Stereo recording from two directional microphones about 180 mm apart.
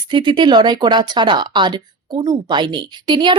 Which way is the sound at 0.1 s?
25° right (ahead or behind).